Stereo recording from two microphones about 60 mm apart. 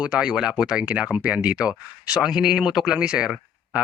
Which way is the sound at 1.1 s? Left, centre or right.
Right.